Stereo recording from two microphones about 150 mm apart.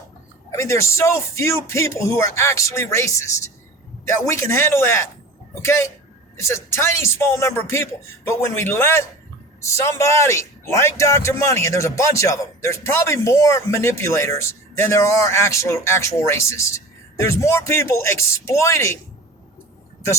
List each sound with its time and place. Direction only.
0.5 s a man's voice: 20° left (ahead or behind)